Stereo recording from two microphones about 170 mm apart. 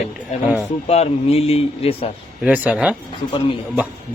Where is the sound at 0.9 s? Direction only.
35° left (ahead or behind).